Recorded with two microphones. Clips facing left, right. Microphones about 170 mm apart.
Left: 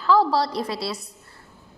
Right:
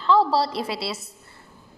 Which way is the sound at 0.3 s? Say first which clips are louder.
Even; 30° right (ahead or behind).